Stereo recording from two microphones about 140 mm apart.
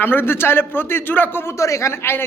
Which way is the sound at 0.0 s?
15° left (ahead or behind).